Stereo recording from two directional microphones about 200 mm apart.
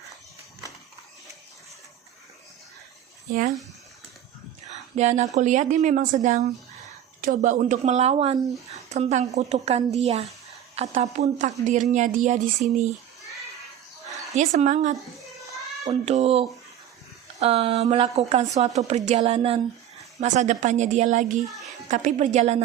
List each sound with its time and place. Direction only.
4.7 s speech: 35° right (ahead or behind)
14.3 s speech: 35° right (ahead or behind)
21.4 s a child's voice: centre (ahead or behind)
21.8 s speech: 40° right (ahead or behind)